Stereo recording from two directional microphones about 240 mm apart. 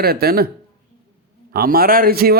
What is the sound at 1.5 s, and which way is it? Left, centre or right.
Speech, right.